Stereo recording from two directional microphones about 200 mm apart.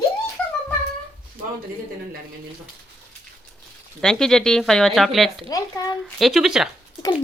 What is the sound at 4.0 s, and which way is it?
Speech, 5° left (ahead or behind).